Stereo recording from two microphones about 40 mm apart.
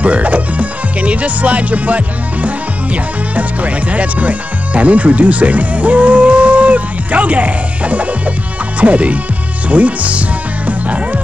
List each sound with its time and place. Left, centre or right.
0.0 s speech: right
10.7 s music: right